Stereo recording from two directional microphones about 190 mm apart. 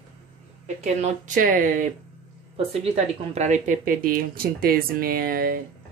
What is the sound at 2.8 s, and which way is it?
Speech, 30° right (ahead or behind).